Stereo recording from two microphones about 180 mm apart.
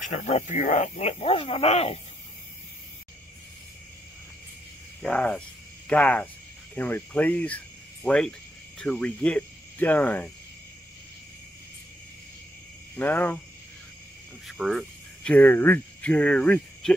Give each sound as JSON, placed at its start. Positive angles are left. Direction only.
{"t": 0.0, "sound": "speech", "side_deg": 40}
{"t": 5.0, "sound": "speech", "side_deg": 5}
{"t": 6.7, "sound": "cricket", "side_deg": 10}
{"t": 12.9, "sound": "speech", "side_deg": 10}
{"t": 14.6, "sound": "speech", "side_deg": 0}